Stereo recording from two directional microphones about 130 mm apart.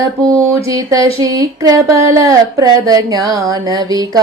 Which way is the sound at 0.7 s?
25° right (ahead or behind).